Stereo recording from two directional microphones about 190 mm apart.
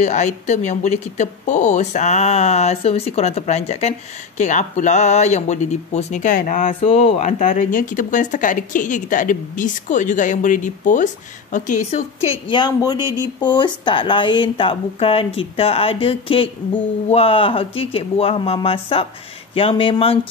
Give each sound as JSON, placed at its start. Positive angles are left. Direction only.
{"t": 0.0, "sound": "speech", "side_deg": 40}